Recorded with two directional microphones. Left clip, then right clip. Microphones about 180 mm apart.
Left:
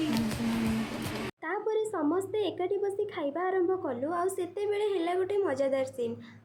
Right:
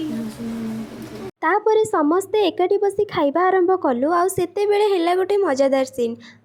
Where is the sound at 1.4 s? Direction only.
50° right (ahead or behind).